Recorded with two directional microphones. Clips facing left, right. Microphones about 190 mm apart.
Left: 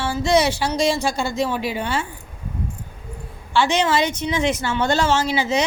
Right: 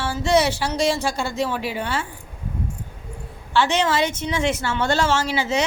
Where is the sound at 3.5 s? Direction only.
15° left (ahead or behind).